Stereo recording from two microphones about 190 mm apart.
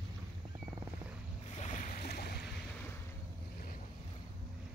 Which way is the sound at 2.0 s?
55° left (ahead or behind).